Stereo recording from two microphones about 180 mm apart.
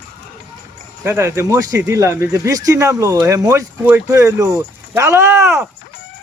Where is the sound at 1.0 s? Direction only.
15° right (ahead or behind).